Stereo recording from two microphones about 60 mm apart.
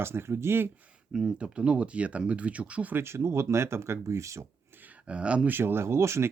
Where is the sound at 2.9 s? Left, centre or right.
Right.